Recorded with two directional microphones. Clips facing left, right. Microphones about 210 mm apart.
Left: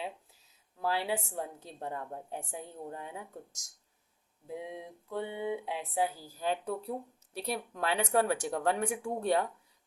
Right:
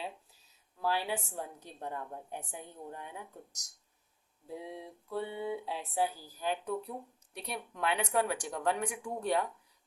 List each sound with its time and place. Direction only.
0.8 s a woman's voice: 25° left (ahead or behind)